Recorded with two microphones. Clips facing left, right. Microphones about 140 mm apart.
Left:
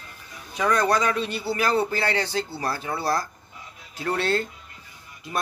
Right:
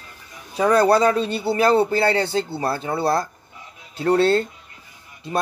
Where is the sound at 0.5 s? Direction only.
30° right (ahead or behind).